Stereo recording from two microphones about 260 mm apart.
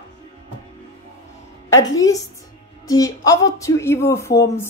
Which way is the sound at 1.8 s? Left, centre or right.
Centre.